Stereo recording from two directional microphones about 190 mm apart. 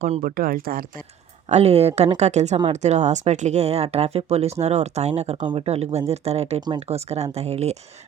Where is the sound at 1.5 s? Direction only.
35° right (ahead or behind).